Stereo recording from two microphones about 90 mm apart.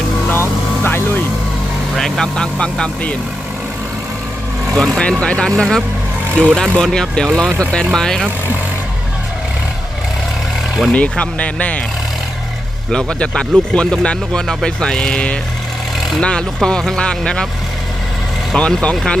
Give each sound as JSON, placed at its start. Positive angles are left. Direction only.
{"t": 0.9, "sound": "vehicle", "side_deg": 20}
{"t": 2.0, "sound": "speech", "side_deg": 5}
{"t": 4.8, "sound": "speech", "side_deg": 10}
{"t": 10.9, "sound": "speech", "side_deg": 15}
{"t": 12.9, "sound": "speech", "side_deg": 10}
{"t": 18.5, "sound": "speech", "side_deg": 10}